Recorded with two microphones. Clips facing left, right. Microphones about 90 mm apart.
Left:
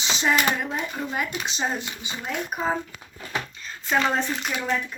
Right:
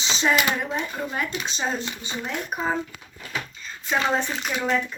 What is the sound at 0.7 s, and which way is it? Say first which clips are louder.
Speech: right 1 dB; 5° left (ahead or behind).